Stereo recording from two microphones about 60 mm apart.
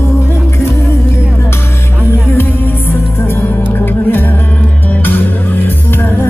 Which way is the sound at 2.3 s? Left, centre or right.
Left.